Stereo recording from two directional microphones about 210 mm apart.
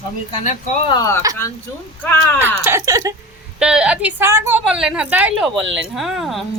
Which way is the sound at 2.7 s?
15° right (ahead or behind).